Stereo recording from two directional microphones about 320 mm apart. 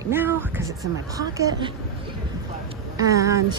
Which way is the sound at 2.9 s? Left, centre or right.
Centre.